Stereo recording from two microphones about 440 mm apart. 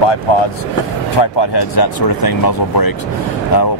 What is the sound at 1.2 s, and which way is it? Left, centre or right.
Speech, left.